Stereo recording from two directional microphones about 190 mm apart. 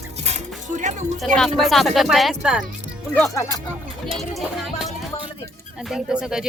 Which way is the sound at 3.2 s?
15° left (ahead or behind).